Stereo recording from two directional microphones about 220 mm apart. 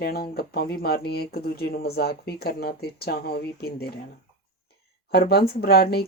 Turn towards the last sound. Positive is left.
turn(degrees=45)  # may be behind; listen again after turning